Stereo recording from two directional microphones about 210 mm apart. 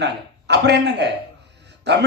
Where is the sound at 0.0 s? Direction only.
55° right (ahead or behind).